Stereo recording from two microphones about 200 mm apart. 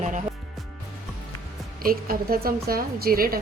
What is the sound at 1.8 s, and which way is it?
A woman's voice, 45° right (ahead or behind).